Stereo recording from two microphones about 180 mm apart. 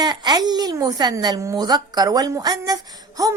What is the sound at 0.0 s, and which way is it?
A woman's voice, 25° right (ahead or behind).